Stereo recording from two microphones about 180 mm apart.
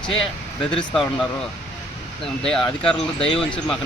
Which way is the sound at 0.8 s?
5° left (ahead or behind).